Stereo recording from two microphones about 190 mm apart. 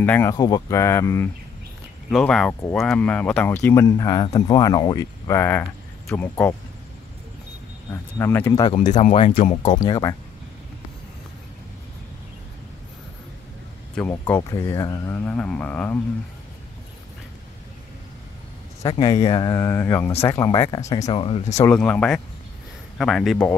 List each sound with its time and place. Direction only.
0.0 s speech: 10° left (ahead or behind)
2.0 s speech: centre (ahead or behind)
7.9 s speech: 15° left (ahead or behind)
8.7 s speech: 40° left (ahead or behind)
9.6 s speech: 25° left (ahead or behind)
13.9 s speech: 10° left (ahead or behind)
18.8 s speech: 20° left (ahead or behind)
21.5 s speech: 10° left (ahead or behind)